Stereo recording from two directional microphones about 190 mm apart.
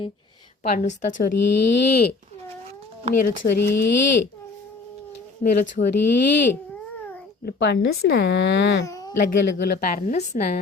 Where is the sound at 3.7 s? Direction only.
70° left (ahead or behind).